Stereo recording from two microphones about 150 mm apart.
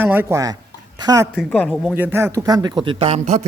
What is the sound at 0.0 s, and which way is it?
Speech, 15° right (ahead or behind).